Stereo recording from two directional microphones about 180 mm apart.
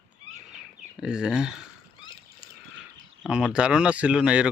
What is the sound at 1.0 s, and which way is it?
Speech, 5° right (ahead or behind).